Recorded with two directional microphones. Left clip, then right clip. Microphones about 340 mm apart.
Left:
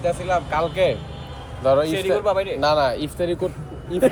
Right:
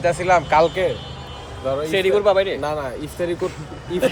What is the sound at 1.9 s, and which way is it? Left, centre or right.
Speech, right.